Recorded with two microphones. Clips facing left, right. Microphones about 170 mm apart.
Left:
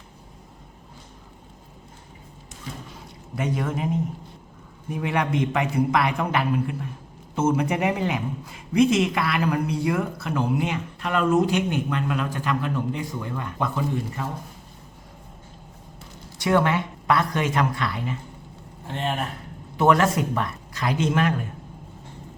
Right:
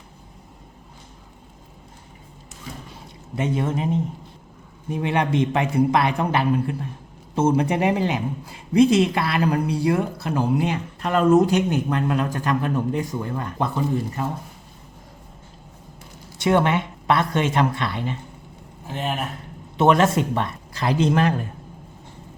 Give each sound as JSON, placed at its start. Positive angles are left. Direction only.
{"t": 3.3, "sound": "a man's voice", "side_deg": -25}
{"t": 16.4, "sound": "a man's voice", "side_deg": -25}
{"t": 18.9, "sound": "a man's voice", "side_deg": -5}
{"t": 19.7, "sound": "a man's voice", "side_deg": -25}